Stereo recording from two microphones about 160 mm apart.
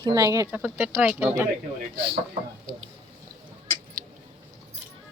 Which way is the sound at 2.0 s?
30° right (ahead or behind).